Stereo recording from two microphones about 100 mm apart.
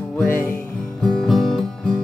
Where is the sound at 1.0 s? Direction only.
5° left (ahead or behind).